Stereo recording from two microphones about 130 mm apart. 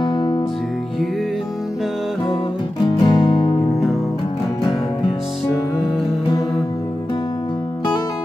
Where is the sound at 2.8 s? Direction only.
35° left (ahead or behind).